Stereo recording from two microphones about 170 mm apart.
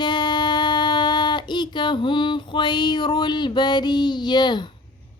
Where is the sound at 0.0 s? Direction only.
25° left (ahead or behind).